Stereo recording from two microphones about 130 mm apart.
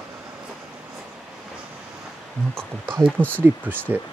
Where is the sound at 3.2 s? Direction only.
15° right (ahead or behind).